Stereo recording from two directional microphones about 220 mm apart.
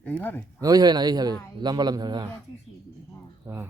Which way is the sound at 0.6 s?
15° right (ahead or behind).